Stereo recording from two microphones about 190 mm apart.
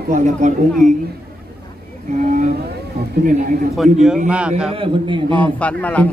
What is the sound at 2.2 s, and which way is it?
Speech, 45° right (ahead or behind).